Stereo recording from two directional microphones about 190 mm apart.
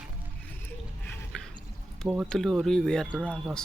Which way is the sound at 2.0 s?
10° right (ahead or behind).